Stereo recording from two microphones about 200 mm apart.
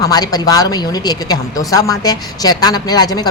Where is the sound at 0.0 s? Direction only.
20° left (ahead or behind).